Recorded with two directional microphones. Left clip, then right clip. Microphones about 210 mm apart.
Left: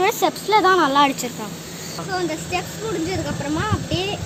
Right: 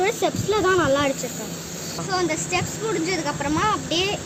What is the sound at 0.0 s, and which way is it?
Speech, 35° left (ahead or behind).